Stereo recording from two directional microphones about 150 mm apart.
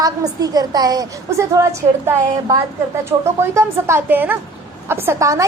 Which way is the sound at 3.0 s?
15° right (ahead or behind).